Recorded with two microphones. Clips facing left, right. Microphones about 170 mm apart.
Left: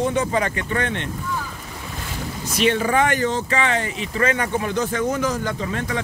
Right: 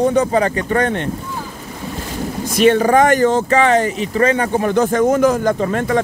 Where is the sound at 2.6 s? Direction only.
45° right (ahead or behind).